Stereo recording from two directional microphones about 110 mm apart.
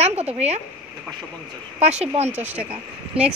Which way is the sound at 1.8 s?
75° right (ahead or behind).